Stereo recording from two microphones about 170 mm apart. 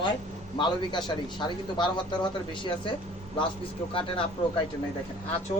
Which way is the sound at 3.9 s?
30° left (ahead or behind).